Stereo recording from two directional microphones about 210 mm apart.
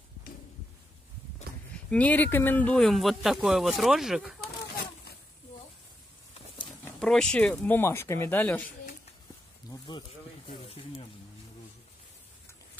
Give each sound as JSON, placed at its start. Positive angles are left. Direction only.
{"t": 1.9, "sound": "speech", "side_deg": 5}
{"t": 6.7, "sound": "speech", "side_deg": 5}
{"t": 9.7, "sound": "a sound", "side_deg": 20}
{"t": 10.5, "sound": "snake", "side_deg": 25}